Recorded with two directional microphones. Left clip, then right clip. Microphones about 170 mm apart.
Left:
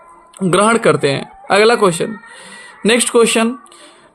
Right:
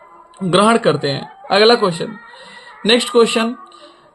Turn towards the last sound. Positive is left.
turn(degrees=45)  # may be behind; listen again after turning